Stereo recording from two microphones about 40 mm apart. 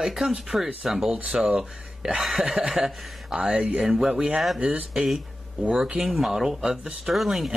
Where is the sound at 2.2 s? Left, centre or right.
Centre.